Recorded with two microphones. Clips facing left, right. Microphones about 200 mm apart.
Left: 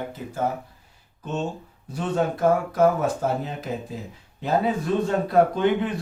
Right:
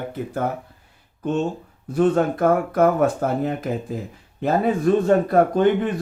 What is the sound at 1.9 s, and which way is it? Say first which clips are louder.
Speech: right 7 dB; 55° right (ahead or behind).